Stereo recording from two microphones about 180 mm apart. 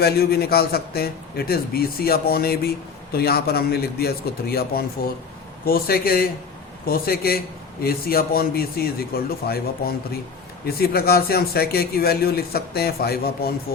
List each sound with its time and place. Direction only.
0.0 s a man's voice: 60° left (ahead or behind)